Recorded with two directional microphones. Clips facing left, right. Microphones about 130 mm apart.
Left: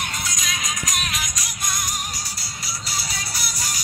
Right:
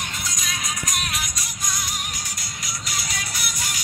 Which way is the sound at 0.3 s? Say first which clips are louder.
Left 1 dB; 90° left.